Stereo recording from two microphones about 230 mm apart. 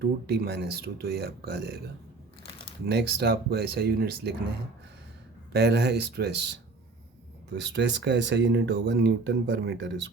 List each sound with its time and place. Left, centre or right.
0.0 s speech: right
2.8 s speech: right
5.5 s speech: right
7.6 s speech: right